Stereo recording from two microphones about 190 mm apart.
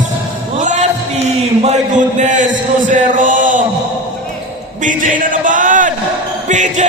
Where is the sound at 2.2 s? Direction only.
40° right (ahead or behind).